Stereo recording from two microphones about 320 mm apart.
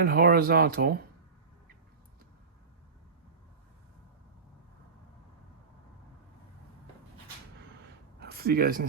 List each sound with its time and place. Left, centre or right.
0.0 s speech: right
8.2 s speech: right